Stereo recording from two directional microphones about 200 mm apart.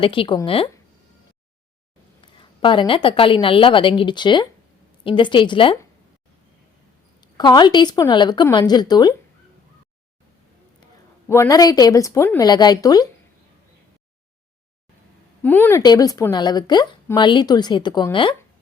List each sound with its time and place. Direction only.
0.0 s a woman's voice: 25° left (ahead or behind)
2.4 s a woman's voice: 25° left (ahead or behind)
7.2 s a woman's voice: 20° left (ahead or behind)
11.3 s a woman's voice: 15° left (ahead or behind)
15.4 s a woman's voice: 10° left (ahead or behind)
15.8 s a woman's voice: 20° left (ahead or behind)